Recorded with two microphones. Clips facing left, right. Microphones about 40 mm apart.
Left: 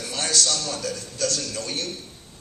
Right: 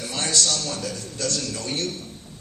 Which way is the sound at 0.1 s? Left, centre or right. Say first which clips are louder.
Even; right.